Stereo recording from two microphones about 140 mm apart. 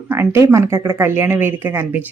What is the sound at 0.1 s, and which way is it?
Speech, 20° right (ahead or behind).